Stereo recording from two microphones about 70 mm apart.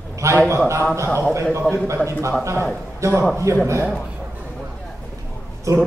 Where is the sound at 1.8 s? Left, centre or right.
Right.